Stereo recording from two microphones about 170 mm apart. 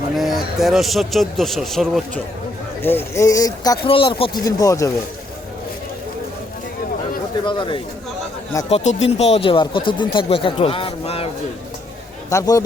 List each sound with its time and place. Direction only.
0.2 s speech: centre (ahead or behind)
2.8 s speech: 15° left (ahead or behind)
7.4 s speech: 30° left (ahead or behind)
8.7 s speech: 45° left (ahead or behind)
12.3 s speech: 20° left (ahead or behind)